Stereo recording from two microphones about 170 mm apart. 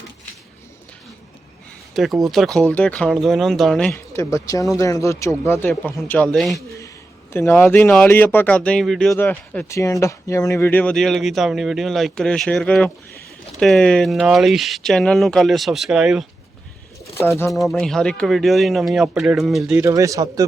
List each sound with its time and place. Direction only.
1.9 s speech: centre (ahead or behind)
3.9 s speech: 15° left (ahead or behind); by 6.6 s centre (ahead or behind)
7.3 s speech: 10° left (ahead or behind); by 16.2 s 5° right (ahead or behind)
17.2 s speech: 15° left (ahead or behind)
17.5 s speech: centre (ahead or behind)
19.8 s speech: 20° right (ahead or behind)